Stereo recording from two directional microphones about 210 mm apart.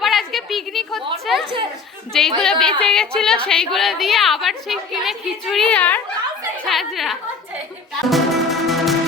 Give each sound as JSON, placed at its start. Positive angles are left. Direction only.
{"t": 0.0, "sound": "a sound", "side_deg": 0}
{"t": 2.4, "sound": "a woman's voice", "side_deg": 5}
{"t": 8.1, "sound": "music", "side_deg": 0}